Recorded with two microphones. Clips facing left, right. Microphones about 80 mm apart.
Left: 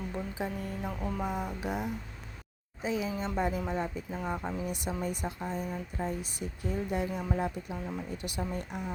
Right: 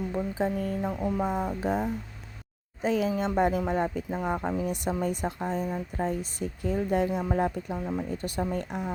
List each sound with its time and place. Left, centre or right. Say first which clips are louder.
0.1 s speech: right 8 dB; right
1.2 s speech: right 6 dB; right
2.8 s speech: right 6 dB; right
6.4 s speech: right 7 dB; right
6.7 s speech: right 6 dB; right